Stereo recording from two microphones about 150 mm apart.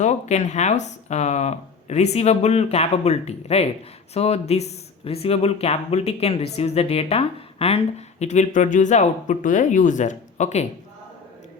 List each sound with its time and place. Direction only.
0.0 s speech: 50° left (ahead or behind)